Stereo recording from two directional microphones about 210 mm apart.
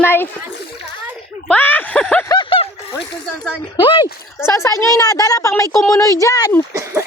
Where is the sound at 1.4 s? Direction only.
10° left (ahead or behind).